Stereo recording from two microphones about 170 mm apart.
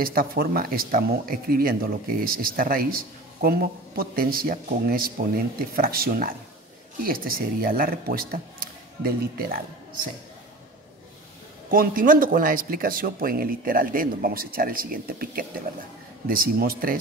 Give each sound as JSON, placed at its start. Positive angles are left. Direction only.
{"t": 0.0, "sound": "speech", "side_deg": -60}
{"t": 11.7, "sound": "speech", "side_deg": -55}